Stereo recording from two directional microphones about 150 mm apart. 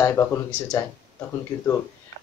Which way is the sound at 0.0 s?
20° left (ahead or behind).